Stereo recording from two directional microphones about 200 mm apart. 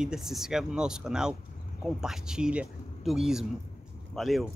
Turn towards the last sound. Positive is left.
turn(degrees=0)  # may be behind; listen again after turning